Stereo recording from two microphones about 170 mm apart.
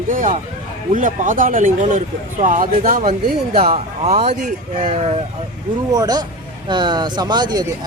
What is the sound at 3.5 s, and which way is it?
Speech, 35° right (ahead or behind).